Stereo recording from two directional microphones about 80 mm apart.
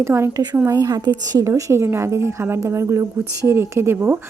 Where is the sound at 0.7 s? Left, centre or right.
Right.